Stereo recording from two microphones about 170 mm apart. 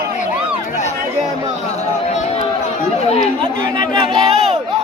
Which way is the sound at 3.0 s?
40° left (ahead or behind).